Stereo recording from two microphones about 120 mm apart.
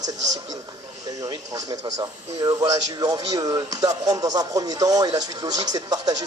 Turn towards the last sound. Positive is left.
turn(degrees=-30)  # may be behind; listen again after turning